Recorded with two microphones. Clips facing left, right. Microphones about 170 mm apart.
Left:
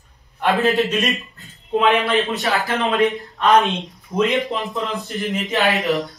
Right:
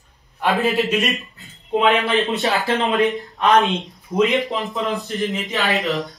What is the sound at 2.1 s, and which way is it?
Speech, 20° right (ahead or behind).